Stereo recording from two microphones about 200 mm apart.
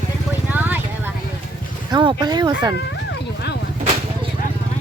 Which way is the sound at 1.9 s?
25° right (ahead or behind).